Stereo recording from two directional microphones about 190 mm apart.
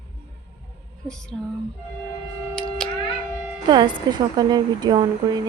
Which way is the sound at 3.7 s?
25° right (ahead or behind).